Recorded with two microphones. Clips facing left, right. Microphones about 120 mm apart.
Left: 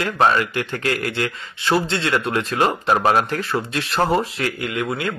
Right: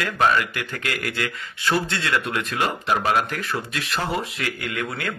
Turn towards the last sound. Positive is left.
turn(degrees=20)  # may be behind; listen again after turning